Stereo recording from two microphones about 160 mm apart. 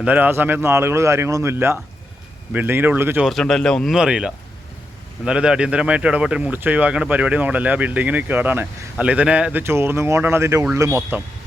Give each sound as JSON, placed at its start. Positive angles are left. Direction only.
{"t": 0.0, "sound": "speech", "side_deg": -10}
{"t": 3.2, "sound": "speech", "side_deg": 0}